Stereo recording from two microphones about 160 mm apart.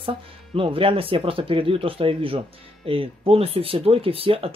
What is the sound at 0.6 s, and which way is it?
Speech, 35° right (ahead or behind).